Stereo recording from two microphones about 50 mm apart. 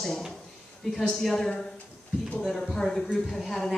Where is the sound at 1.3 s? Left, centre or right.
Centre.